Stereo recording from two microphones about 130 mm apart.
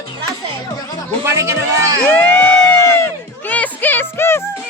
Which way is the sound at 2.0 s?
15° left (ahead or behind).